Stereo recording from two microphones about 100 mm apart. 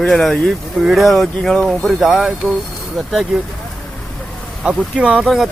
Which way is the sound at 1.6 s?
5° right (ahead or behind).